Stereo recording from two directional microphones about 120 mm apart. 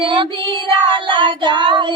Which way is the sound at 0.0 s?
45° right (ahead or behind).